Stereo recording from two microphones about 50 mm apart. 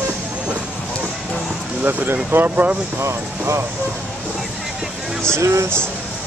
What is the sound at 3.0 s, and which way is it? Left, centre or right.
Speech, right.